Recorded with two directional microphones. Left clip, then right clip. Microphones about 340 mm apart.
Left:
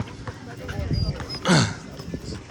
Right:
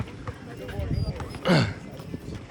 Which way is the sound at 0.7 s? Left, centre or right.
Left.